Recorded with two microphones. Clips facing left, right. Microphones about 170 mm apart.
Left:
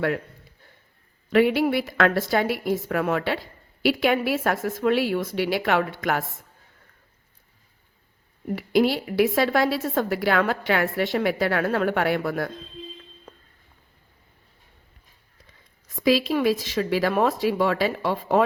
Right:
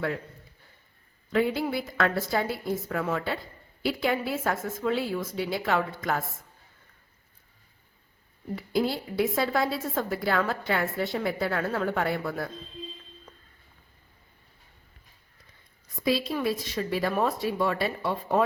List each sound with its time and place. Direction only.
1.3 s a woman's voice: 75° left (ahead or behind)
8.4 s a woman's voice: 80° left
16.0 s speech: 90° left